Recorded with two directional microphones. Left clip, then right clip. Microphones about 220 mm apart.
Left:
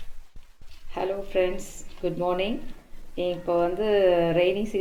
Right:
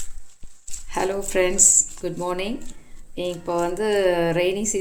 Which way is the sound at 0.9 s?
35° right (ahead or behind).